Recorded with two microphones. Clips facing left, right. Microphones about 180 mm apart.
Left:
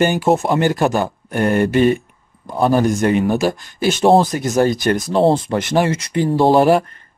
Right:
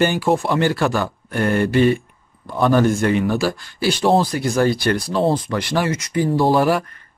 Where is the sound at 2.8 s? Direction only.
20° left (ahead or behind).